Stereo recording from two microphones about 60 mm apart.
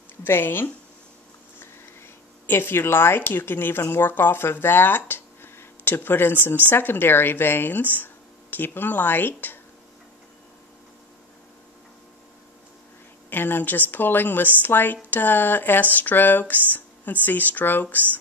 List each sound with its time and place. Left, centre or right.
0.2 s speech: left
13.3 s speech: left